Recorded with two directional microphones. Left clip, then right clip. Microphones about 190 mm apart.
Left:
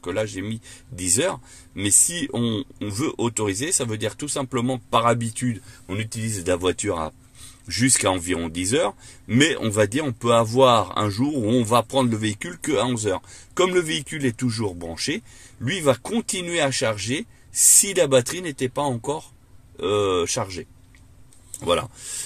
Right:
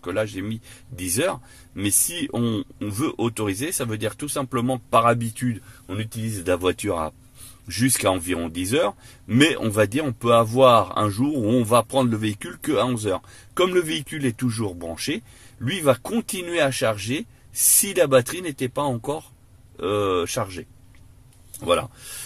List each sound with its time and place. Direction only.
0.0 s a man's voice: centre (ahead or behind)
5.9 s speech: 15° left (ahead or behind)
6.4 s a man's voice: centre (ahead or behind)